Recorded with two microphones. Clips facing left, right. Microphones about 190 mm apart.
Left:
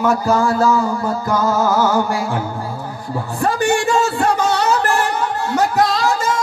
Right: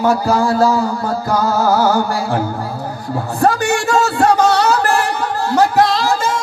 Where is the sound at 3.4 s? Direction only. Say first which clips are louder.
Right 1 dB; 40° right (ahead or behind).